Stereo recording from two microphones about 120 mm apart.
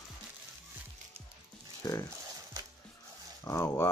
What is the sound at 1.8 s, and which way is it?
Speech, 30° left (ahead or behind).